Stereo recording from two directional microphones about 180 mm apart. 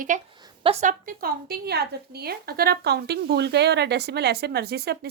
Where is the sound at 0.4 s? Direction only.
30° right (ahead or behind).